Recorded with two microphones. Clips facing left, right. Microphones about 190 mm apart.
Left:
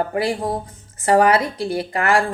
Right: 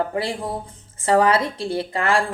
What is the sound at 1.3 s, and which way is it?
Speech, 25° right (ahead or behind).